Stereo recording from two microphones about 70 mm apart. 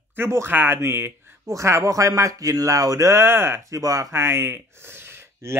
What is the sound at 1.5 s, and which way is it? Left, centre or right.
Speech, right.